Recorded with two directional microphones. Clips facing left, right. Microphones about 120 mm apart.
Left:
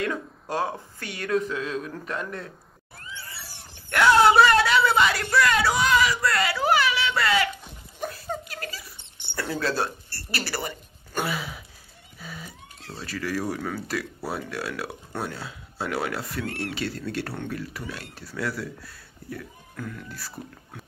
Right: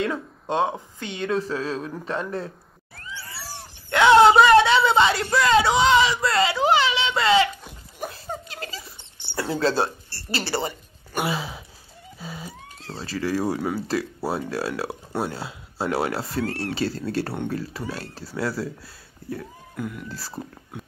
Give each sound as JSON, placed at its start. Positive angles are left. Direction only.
{"t": 0.0, "sound": "speech", "side_deg": -25}
{"t": 3.9, "sound": "speech", "side_deg": -20}
{"t": 8.3, "sound": "a sound", "side_deg": -25}
{"t": 9.3, "sound": "speech", "side_deg": -25}
{"t": 13.6, "sound": "speech", "side_deg": -15}
{"t": 13.8, "sound": "speech", "side_deg": -30}
{"t": 19.8, "sound": "speech", "side_deg": -10}
{"t": 20.1, "sound": "speech", "side_deg": -30}